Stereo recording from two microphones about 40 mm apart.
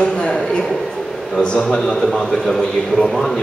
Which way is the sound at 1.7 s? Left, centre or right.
Centre.